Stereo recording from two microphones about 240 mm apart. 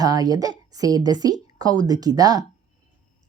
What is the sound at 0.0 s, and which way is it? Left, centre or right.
A woman's voice, centre.